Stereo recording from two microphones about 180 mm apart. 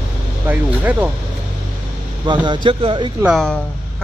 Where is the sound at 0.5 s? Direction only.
10° right (ahead or behind).